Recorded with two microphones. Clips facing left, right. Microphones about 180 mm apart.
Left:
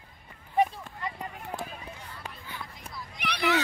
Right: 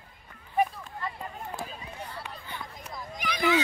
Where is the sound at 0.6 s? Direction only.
25° left (ahead or behind).